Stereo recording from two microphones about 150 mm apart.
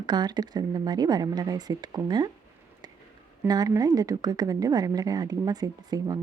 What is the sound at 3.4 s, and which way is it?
Speech, 25° right (ahead or behind).